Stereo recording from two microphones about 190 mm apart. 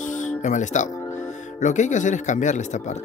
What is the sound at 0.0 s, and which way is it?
Music, 40° left (ahead or behind).